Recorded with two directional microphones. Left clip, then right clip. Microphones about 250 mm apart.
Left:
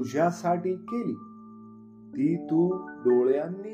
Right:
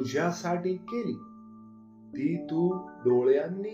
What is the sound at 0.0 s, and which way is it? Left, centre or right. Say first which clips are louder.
Speech: left 4 dB; left.